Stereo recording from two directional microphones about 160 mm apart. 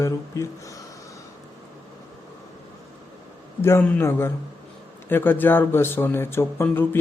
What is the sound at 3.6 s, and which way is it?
Speech, 15° left (ahead or behind).